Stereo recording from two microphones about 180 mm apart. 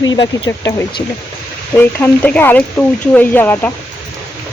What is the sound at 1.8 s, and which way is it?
Speech, 10° left (ahead or behind).